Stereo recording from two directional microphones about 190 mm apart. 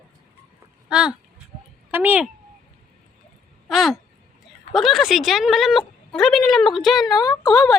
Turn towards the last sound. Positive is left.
turn(degrees=0)  # may be behind; listen again after turning